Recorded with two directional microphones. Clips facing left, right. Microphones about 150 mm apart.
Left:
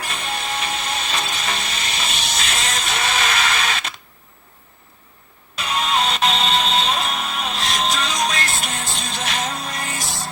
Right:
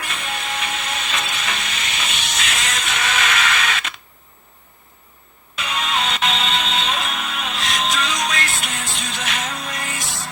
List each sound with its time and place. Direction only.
0.0 s music: 35° left (ahead or behind)
5.5 s music: 40° left (ahead or behind)